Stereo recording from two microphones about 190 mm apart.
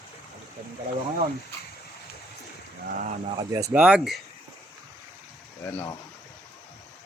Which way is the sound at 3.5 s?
10° right (ahead or behind).